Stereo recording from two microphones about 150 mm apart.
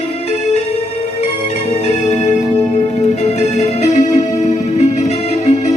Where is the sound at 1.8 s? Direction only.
50° left (ahead or behind).